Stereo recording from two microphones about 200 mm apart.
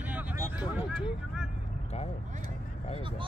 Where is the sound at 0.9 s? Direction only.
5° right (ahead or behind).